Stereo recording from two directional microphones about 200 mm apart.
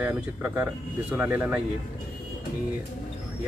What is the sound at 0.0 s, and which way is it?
Speech, 5° right (ahead or behind).